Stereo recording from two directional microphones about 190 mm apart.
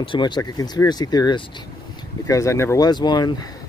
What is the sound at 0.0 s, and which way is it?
Speech, 25° left (ahead or behind).